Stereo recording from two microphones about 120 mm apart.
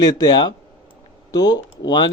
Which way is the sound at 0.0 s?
35° left (ahead or behind).